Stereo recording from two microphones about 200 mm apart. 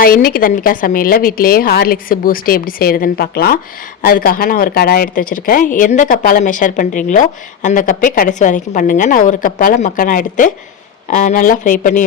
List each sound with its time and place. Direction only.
0.0 s a woman's voice: 45° left (ahead or behind)